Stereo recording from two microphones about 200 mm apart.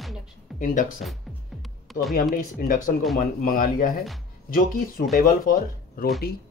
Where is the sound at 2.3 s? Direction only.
45° left (ahead or behind).